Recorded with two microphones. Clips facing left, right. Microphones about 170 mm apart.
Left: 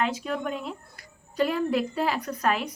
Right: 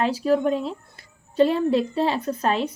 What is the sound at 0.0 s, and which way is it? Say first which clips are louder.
A woman's voice: right 8 dB; 35° right (ahead or behind).